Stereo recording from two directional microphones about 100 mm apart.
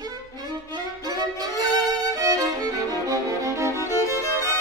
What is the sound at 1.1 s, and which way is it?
Violin, 40° right (ahead or behind).